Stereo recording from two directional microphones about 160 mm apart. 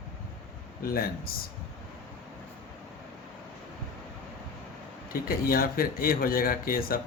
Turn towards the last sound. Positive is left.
turn(degrees=65)  # may be behind; listen again after turning